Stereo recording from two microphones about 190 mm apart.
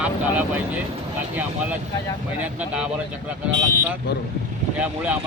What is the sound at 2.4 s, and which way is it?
Speech, 5° right (ahead or behind).